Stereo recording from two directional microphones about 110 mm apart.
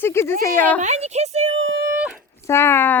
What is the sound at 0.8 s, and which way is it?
Speech, 85° right.